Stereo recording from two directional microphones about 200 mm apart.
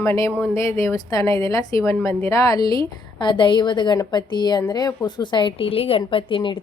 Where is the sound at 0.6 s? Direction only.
15° left (ahead or behind).